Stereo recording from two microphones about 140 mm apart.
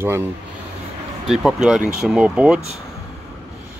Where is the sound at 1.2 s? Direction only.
5° right (ahead or behind).